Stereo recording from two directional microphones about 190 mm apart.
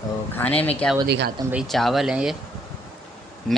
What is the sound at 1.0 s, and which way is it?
Speech, 65° right (ahead or behind).